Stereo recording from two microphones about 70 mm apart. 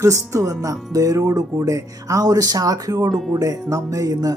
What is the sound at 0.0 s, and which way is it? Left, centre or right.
Speech, right.